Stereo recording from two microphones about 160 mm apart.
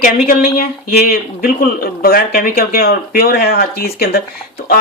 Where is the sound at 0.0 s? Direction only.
60° left (ahead or behind).